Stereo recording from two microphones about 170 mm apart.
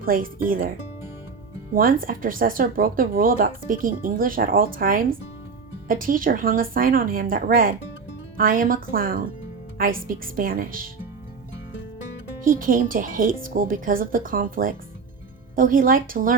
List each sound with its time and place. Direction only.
0.0 s speech: 55° right (ahead or behind)
1.7 s speech: 55° right (ahead or behind)
12.5 s speech: 55° right (ahead or behind)